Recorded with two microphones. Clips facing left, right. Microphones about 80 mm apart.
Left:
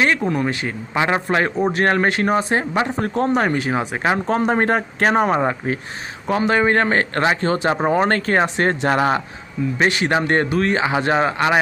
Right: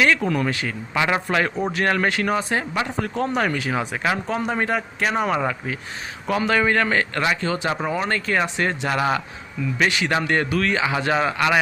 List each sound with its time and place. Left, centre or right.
0.2 s a man's voice: left
4.3 s speech: left